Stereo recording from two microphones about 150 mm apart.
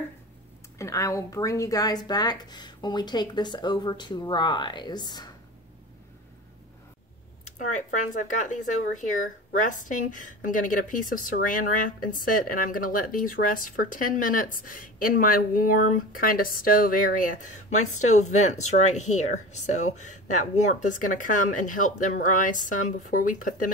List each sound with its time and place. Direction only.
0.7 s speech: 20° left (ahead or behind)
8.1 s a woman's voice: 60° left (ahead or behind)